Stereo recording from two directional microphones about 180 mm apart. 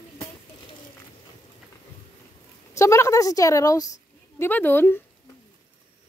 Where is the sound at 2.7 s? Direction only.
15° left (ahead or behind).